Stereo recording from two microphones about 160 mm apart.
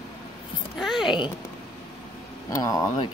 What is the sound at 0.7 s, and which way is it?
Speech, centre (ahead or behind).